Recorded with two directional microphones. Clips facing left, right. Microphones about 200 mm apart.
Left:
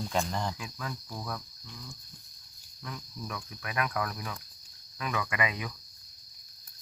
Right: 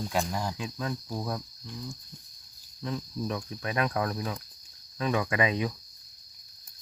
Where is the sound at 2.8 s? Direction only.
30° right (ahead or behind).